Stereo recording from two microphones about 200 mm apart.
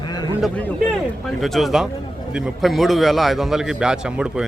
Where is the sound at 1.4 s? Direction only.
Centre (ahead or behind).